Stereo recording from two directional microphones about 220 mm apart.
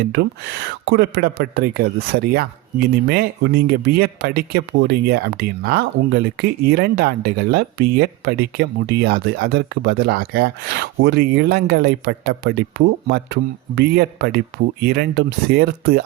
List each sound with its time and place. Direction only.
0.1 s speech: 50° right (ahead or behind)